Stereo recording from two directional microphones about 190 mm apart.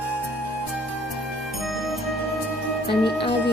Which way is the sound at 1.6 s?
Centre (ahead or behind).